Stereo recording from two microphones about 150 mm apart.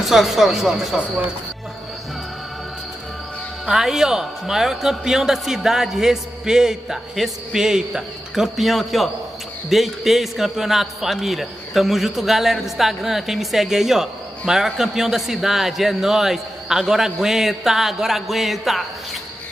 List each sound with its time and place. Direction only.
0.0 s a man's voice: centre (ahead or behind)
3.6 s a man's voice: centre (ahead or behind)